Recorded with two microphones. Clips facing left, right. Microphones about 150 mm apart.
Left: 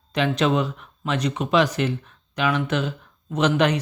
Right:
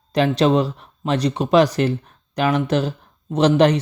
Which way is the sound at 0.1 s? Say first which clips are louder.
Right 5 dB; 35° right (ahead or behind).